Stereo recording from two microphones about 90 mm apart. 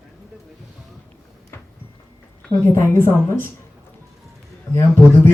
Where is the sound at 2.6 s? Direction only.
25° left (ahead or behind).